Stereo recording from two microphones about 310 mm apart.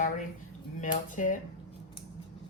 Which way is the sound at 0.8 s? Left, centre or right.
Left.